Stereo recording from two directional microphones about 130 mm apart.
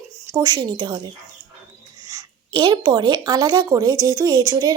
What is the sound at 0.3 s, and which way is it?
Speech, 30° right (ahead or behind).